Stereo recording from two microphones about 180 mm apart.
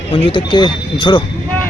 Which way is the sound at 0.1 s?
30° left (ahead or behind).